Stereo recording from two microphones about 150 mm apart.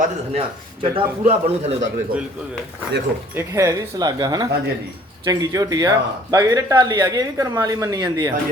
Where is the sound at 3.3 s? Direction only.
20° right (ahead or behind).